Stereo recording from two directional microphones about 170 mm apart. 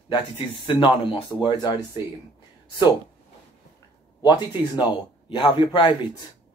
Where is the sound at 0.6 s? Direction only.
30° left (ahead or behind).